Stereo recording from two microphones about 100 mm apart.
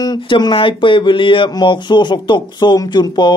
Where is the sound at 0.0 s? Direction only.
45° left (ahead or behind).